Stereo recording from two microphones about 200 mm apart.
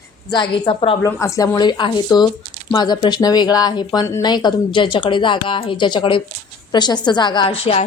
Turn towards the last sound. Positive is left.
turn(degrees=20)  # may be behind; listen again after turning